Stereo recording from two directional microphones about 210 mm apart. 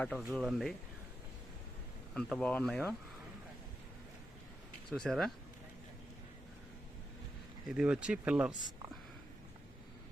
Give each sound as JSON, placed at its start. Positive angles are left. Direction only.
{"t": 0.0, "sound": "speech", "side_deg": 0}
{"t": 2.1, "sound": "speech", "side_deg": 5}
{"t": 4.9, "sound": "speech", "side_deg": 5}
{"t": 7.7, "sound": "speech", "side_deg": -5}